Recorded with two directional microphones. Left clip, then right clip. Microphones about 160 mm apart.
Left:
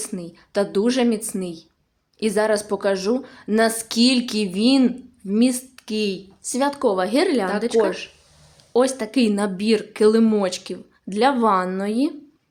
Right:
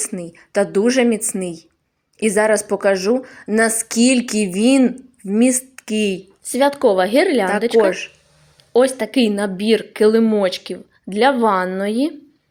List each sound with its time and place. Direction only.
0.2 s a woman's voice: 20° right (ahead or behind)
1.3 s speech: 5° right (ahead or behind)
2.2 s a woman's voice: 20° right (ahead or behind)
5.5 s a woman's voice: 20° right (ahead or behind)
6.4 s speech: 10° right (ahead or behind)